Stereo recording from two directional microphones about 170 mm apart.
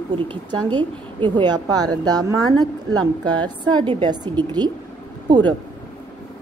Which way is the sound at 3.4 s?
25° right (ahead or behind).